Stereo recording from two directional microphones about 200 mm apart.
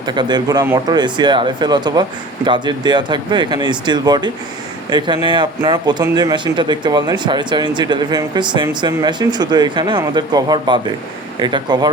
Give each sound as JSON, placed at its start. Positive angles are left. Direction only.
{"t": 0.0, "sound": "speech", "side_deg": -20}